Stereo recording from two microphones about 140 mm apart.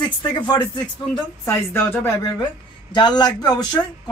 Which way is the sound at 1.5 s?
15° left (ahead or behind).